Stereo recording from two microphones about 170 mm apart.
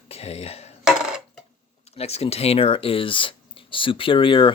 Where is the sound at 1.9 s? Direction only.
35° left (ahead or behind).